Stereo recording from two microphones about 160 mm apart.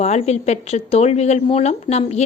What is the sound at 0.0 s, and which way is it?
A woman's voice, 40° left (ahead or behind).